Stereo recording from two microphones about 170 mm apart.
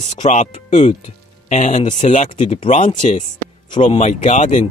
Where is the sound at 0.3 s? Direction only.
45° left (ahead or behind).